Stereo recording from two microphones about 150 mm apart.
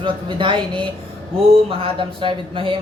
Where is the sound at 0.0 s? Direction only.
35° right (ahead or behind).